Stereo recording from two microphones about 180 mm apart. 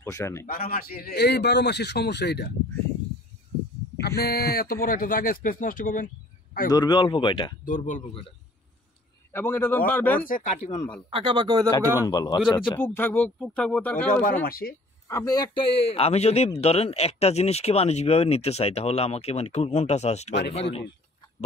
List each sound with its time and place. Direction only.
0.0 s speech: 15° left (ahead or behind)
0.5 s a man's voice: 55° left (ahead or behind)
4.0 s speech: 60° left (ahead or behind)
6.7 s speech: 25° left (ahead or behind)
7.6 s speech: 45° left (ahead or behind)
9.3 s speech: 10° left (ahead or behind)
10.2 s a man's voice: 45° left (ahead or behind)
11.1 s a man's voice: 30° right (ahead or behind)
12.0 s speech: 20° left (ahead or behind)
12.7 s speech: 10° left (ahead or behind)
14.4 s a man's voice: 55° left (ahead or behind)
15.0 s a man's voice: 20° left (ahead or behind); by 20.3 s 40° left (ahead or behind)